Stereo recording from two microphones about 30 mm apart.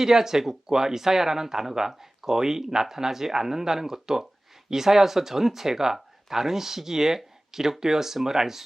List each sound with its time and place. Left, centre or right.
0.0 s speech: centre